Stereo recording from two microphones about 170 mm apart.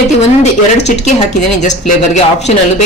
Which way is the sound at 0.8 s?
45° left (ahead or behind).